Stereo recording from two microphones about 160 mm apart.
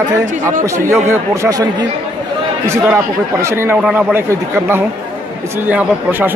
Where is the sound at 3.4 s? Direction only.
15° right (ahead or behind).